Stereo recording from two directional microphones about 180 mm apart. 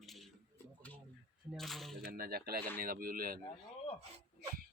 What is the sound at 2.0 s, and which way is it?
Speech, 60° right (ahead or behind).